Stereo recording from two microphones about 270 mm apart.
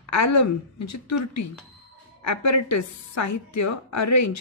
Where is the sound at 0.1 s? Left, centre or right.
Left.